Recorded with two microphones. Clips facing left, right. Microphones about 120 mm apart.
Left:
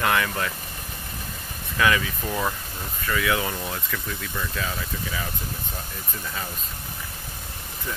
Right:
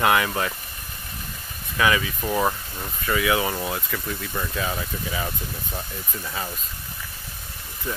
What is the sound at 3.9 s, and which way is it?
Speech, 20° right (ahead or behind).